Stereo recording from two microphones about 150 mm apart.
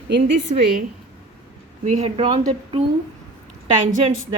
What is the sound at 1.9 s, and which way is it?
Speech, 45° right (ahead or behind).